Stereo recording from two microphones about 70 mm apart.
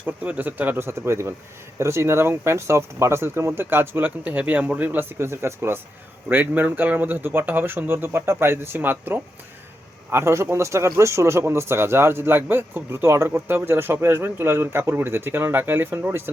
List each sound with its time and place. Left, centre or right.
0.0 s speech: right